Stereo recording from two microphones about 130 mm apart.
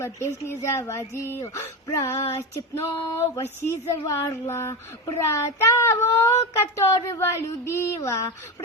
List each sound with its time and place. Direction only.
0.0 s speech: 20° left (ahead or behind)